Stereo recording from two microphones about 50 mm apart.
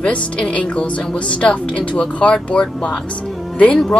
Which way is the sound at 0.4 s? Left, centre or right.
Left.